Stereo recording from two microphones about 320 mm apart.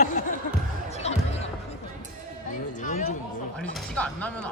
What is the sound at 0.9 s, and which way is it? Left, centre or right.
Basketball bounce, centre.